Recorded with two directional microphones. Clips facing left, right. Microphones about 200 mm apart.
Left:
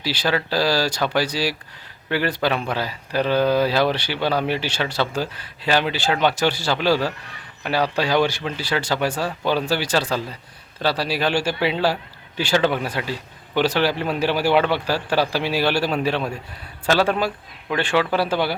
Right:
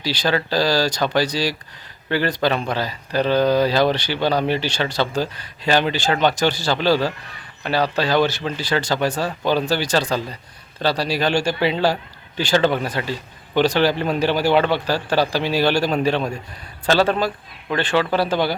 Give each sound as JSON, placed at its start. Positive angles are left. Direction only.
{"t": 0.0, "sound": "speech", "side_deg": 5}